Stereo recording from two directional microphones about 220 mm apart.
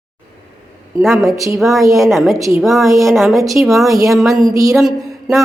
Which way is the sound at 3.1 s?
Centre (ahead or behind).